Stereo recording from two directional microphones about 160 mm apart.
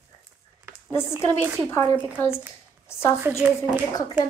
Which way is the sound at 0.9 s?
15° left (ahead or behind).